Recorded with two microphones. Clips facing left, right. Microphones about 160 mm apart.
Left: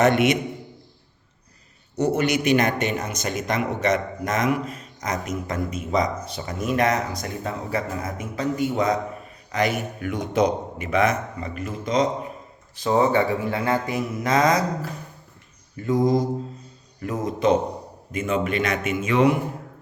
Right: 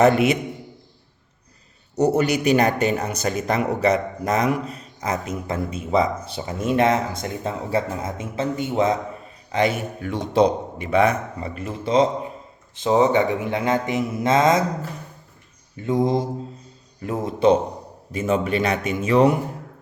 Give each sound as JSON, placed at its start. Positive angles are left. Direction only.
{"t": 0.0, "sound": "speech", "side_deg": -35}
{"t": 2.0, "sound": "speech", "side_deg": -40}
{"t": 18.1, "sound": "speech", "side_deg": -35}